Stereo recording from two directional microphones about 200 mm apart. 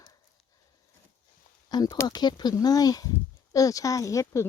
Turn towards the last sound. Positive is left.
turn(degrees=15)  # may be behind; listen again after turning